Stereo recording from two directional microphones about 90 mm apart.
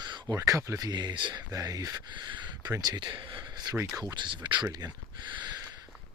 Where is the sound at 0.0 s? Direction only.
55° right (ahead or behind).